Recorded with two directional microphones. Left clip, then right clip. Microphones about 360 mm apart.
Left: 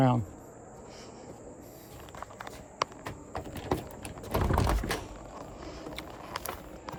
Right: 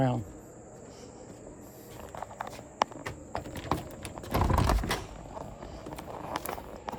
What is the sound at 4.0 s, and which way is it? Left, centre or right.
Typing, centre.